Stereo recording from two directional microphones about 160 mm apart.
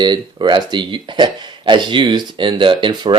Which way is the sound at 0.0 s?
30° right (ahead or behind).